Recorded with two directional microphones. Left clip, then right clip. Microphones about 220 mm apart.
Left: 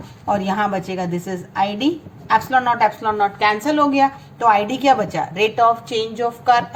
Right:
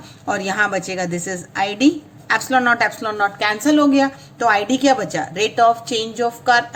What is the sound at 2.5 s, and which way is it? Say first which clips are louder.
A woman's voice: right 3 dB; 40° right (ahead or behind).